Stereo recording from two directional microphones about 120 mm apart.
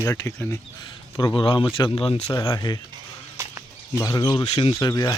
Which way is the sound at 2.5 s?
35° left (ahead or behind).